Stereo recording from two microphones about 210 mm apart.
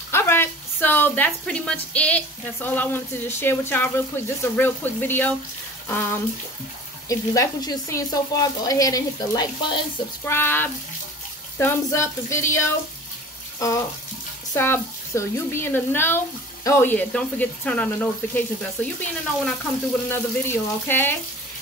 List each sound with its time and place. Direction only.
0.1 s a woman's voice: 10° left (ahead or behind)
20.1 s speech: 10° left (ahead or behind)